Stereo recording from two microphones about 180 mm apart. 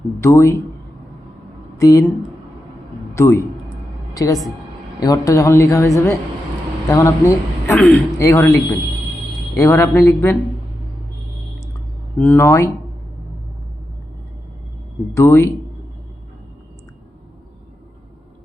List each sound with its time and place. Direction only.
0.2 s a woman's voice: 15° left (ahead or behind)
1.8 s speech: 20° left (ahead or behind)
3.2 s a woman's voice: 15° left (ahead or behind)
12.1 s a woman's voice: 10° left (ahead or behind)
15.1 s a woman's voice: 15° left (ahead or behind)